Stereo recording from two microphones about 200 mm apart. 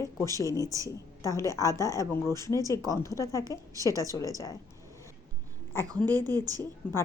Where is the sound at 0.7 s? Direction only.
15° right (ahead or behind).